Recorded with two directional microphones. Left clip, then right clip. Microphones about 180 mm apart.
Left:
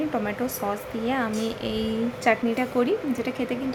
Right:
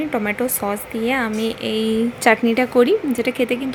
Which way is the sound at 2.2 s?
30° right (ahead or behind).